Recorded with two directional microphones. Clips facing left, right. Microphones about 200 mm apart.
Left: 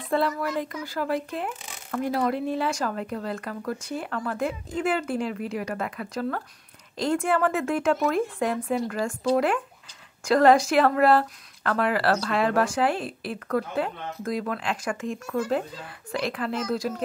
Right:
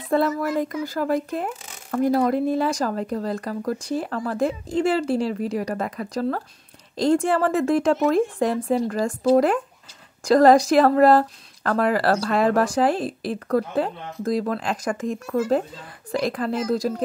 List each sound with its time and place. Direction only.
0.1 s speech: 45° right (ahead or behind)